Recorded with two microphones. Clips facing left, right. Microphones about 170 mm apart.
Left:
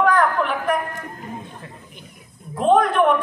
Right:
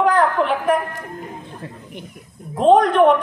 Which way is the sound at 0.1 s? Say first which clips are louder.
Right 2 dB; 30° right (ahead or behind).